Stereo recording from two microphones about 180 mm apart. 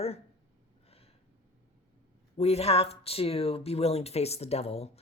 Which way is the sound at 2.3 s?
35° left (ahead or behind).